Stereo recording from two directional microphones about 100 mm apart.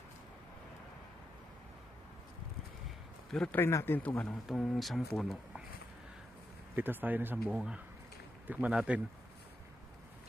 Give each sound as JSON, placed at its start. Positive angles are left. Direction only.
{"t": 3.3, "sound": "speech", "side_deg": 10}
{"t": 3.6, "sound": "speech", "side_deg": 25}
{"t": 4.4, "sound": "speech", "side_deg": 0}
{"t": 6.7, "sound": "speech", "side_deg": -20}
{"t": 7.4, "sound": "speech", "side_deg": -5}